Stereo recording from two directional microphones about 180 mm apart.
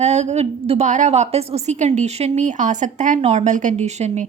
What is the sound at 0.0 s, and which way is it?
A woman's voice, 40° right (ahead or behind).